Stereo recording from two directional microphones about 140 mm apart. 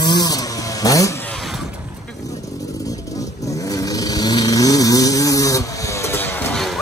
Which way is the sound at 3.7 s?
25° left (ahead or behind).